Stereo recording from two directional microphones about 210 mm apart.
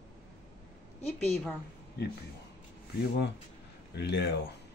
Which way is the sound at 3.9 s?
55° left (ahead or behind).